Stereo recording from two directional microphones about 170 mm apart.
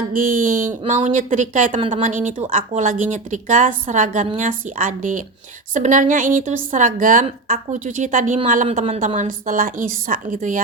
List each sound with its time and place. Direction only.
0.1 s speech: 50° right (ahead or behind)